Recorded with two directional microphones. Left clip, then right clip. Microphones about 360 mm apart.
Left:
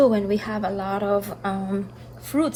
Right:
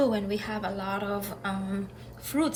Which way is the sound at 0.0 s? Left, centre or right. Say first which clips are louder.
Left 8 dB; centre.